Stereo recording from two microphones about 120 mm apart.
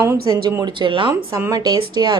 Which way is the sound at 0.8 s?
45° right (ahead or behind).